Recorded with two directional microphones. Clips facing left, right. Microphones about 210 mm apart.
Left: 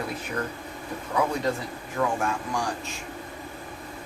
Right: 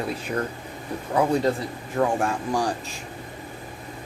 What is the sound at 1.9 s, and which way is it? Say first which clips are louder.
Speech: right 4 dB; 35° right (ahead or behind).